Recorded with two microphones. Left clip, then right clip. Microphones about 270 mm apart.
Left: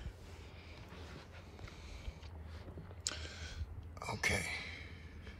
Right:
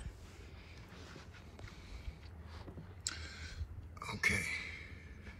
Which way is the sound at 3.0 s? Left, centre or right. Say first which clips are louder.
Left 1 dB; centre.